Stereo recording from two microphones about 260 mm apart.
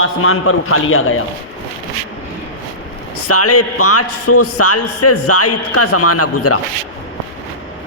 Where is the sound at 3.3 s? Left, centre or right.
Left.